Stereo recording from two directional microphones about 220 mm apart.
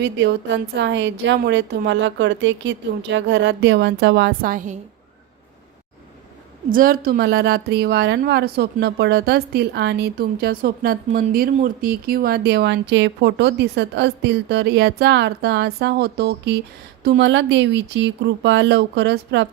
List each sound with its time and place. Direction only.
0.0 s a woman's voice: 50° right (ahead or behind); by 4.8 s 35° right (ahead or behind)
6.7 s a woman's voice: 40° right (ahead or behind)